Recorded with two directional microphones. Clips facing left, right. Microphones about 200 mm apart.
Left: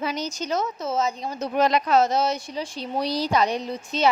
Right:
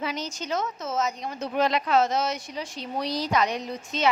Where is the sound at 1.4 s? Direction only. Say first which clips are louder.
Left 3 dB; 40° left (ahead or behind).